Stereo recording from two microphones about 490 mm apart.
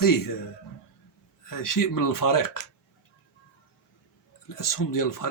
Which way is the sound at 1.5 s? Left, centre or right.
Left.